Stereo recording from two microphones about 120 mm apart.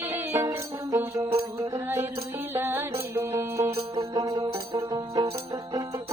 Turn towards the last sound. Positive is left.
turn(degrees=-30)  # may be behind; listen again after turning